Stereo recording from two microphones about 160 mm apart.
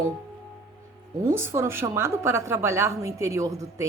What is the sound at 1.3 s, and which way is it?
A woman's voice, 15° right (ahead or behind).